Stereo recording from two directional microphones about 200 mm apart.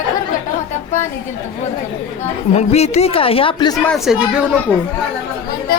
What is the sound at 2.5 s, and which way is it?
Speech, 35° left (ahead or behind).